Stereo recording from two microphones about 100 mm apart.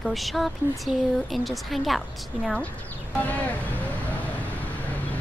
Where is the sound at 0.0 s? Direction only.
Centre (ahead or behind).